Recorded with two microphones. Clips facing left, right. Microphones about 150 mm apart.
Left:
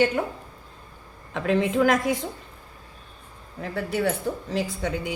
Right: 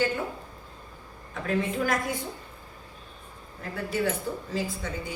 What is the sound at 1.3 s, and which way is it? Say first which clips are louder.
Speech: left 5 dB; 90° left.